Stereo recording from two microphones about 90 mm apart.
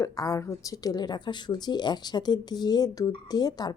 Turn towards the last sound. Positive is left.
turn(degrees=50)  # may be behind; listen again after turning